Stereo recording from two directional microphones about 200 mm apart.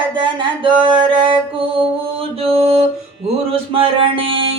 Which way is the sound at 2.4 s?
30° right (ahead or behind).